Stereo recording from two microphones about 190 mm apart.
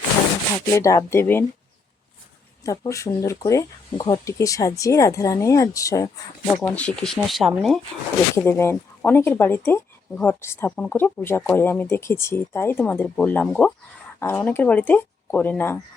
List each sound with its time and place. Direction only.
0.6 s speech: 15° left (ahead or behind)
2.6 s speech: 15° left (ahead or behind); by 7.8 s centre (ahead or behind)
8.4 s speech: 15° left (ahead or behind)